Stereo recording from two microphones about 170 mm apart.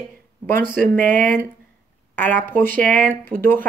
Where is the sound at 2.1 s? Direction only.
10° left (ahead or behind).